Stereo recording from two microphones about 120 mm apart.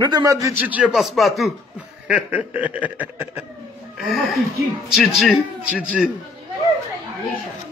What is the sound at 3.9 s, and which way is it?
Speech, centre (ahead or behind).